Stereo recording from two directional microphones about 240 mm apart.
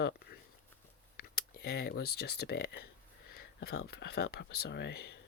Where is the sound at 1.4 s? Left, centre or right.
Left.